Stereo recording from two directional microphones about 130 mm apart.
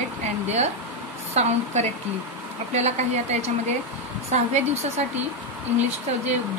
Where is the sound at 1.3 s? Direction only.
60° right (ahead or behind).